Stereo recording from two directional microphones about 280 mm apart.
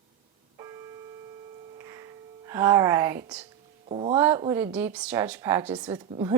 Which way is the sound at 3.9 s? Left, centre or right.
Right.